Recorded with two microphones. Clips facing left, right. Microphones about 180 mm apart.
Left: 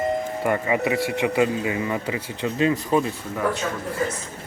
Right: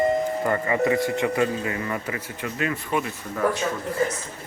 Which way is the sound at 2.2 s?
30° left (ahead or behind).